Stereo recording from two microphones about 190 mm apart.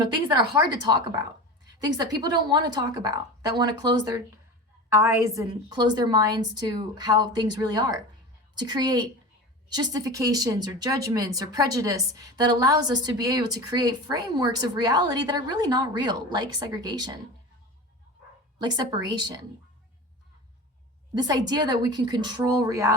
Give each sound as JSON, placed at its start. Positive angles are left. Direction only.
{"t": 0.0, "sound": "speech", "side_deg": -20}
{"t": 18.6, "sound": "speech", "side_deg": -20}
{"t": 21.2, "sound": "speech", "side_deg": -20}